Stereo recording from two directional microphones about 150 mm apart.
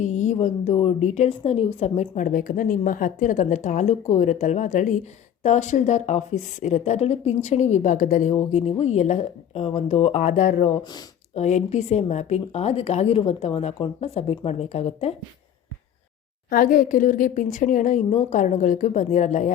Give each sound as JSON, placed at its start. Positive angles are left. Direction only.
{"t": 0.0, "sound": "a woman's voice", "side_deg": 50}
{"t": 16.5, "sound": "speech", "side_deg": 70}